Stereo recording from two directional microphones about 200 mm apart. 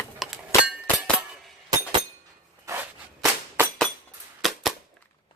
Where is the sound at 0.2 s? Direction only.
Centre (ahead or behind).